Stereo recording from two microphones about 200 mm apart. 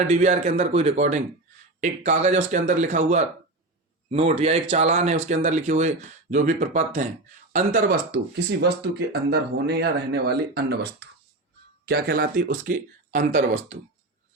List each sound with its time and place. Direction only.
0.0 s a man's voice: 35° right (ahead or behind)
8.6 s speech: 55° right (ahead or behind)
11.9 s speech: 50° right (ahead or behind)